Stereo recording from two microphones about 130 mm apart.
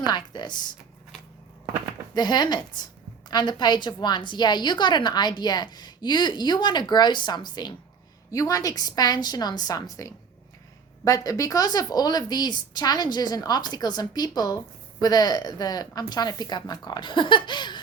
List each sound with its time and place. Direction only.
0.0 s a woman's voice: 35° left (ahead or behind)
2.1 s a woman's voice: 35° left (ahead or behind)